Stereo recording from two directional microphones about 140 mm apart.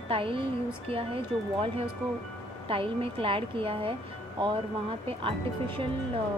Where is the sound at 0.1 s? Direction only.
40° right (ahead or behind).